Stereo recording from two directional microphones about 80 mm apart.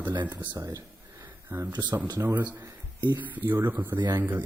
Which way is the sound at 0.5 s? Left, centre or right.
Right.